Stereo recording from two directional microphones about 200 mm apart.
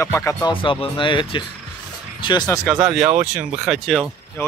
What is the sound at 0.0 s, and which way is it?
Speech, 15° left (ahead or behind).